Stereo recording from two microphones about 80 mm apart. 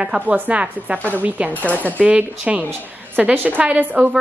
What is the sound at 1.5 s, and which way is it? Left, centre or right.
Speech, centre.